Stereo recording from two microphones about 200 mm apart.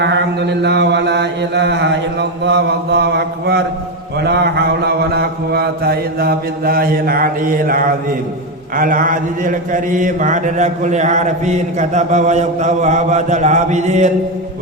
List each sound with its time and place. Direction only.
0.0 s chant: 60° right (ahead or behind)
4.2 s mantra: 55° right (ahead or behind)
8.7 s a man's voice: 45° right (ahead or behind)